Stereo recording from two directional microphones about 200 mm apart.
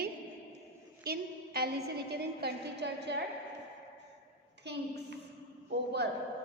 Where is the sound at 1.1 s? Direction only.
50° right (ahead or behind).